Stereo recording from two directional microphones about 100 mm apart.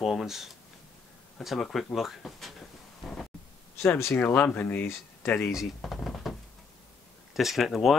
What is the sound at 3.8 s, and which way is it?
Speech, 25° left (ahead or behind).